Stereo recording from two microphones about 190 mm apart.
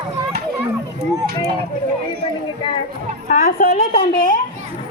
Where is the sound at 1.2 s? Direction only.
55° right (ahead or behind).